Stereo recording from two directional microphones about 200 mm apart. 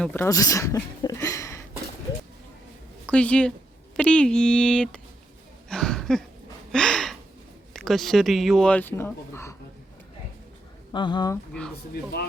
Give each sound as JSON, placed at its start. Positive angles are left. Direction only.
{"t": 0.0, "sound": "speech", "side_deg": 10}
{"t": 3.1, "sound": "speech", "side_deg": 5}
{"t": 5.6, "sound": "a sound", "side_deg": 0}
{"t": 6.7, "sound": "gasp", "side_deg": 5}
{"t": 7.7, "sound": "speech", "side_deg": 0}
{"t": 10.9, "sound": "speech", "side_deg": 20}